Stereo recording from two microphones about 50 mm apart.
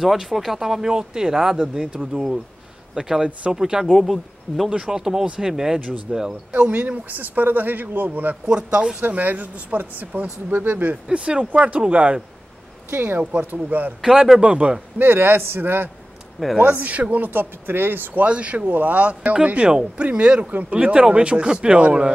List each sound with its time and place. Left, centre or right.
0.0 s speech: centre
6.5 s a man's voice: right
7.2 s speech: right
8.5 s a man's voice: centre
9.0 s speech: right
11.1 s a man's voice: centre
12.9 s speech: right
14.1 s speech: centre
14.4 s a man's voice: right
15.0 s a man's voice: right
18.2 s a man's voice: right